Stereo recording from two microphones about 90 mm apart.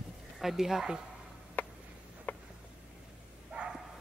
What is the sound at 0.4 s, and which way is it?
Speech, 5° right (ahead or behind).